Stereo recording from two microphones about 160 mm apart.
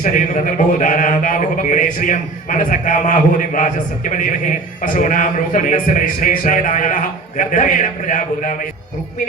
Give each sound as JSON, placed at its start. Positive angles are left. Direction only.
{"t": 0.0, "sound": "a man's voice", "side_deg": 55}